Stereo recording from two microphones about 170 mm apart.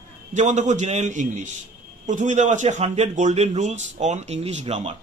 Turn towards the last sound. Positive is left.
turn(degrees=-35)  # may be behind; listen again after turning